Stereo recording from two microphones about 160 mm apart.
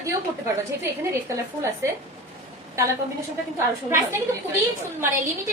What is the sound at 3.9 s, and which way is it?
Speech, 15° right (ahead or behind).